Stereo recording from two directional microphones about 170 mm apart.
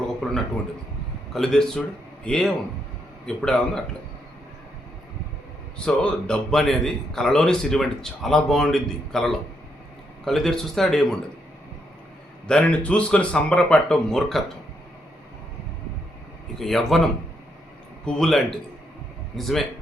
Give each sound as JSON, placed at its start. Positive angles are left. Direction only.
{"t": 1.3, "sound": "a man's voice", "side_deg": 0}
{"t": 5.7, "sound": "a man's voice", "side_deg": 5}
{"t": 12.5, "sound": "a man's voice", "side_deg": 5}
{"t": 16.6, "sound": "a man's voice", "side_deg": 0}
{"t": 18.0, "sound": "a man's voice", "side_deg": 0}